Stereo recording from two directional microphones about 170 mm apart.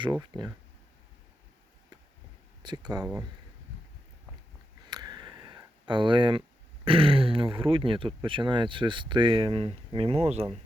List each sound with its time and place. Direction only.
0.0 s speech: 25° right (ahead or behind)
2.6 s speech: 25° right (ahead or behind)
3.0 s speech: 5° right (ahead or behind)
4.9 s a sound: 25° right (ahead or behind)
6.8 s speech: 30° right (ahead or behind)